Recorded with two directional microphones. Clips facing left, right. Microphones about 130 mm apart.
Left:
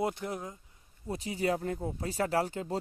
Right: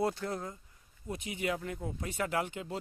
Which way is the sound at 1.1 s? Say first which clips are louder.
Left 4 dB; 35° left (ahead or behind).